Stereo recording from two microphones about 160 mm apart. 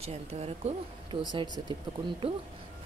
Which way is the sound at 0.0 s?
40° right (ahead or behind).